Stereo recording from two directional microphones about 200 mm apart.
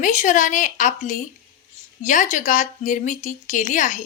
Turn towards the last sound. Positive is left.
turn(degrees=40)  # may be behind; listen again after turning